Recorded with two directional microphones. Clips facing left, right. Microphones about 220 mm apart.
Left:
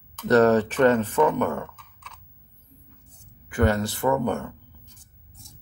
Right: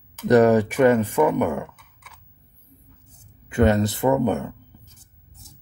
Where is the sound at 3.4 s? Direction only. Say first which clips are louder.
Right 4 dB; 20° right (ahead or behind).